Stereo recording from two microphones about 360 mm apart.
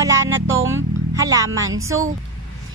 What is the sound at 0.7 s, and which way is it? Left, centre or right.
Speech, centre.